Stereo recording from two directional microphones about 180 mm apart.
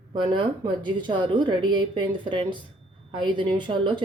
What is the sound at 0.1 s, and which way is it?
A woman's voice, 25° right (ahead or behind).